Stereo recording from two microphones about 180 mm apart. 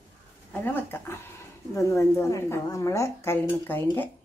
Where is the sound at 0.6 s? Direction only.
10° left (ahead or behind).